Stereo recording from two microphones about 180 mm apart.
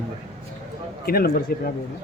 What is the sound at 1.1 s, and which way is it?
Speech, 55° left (ahead or behind).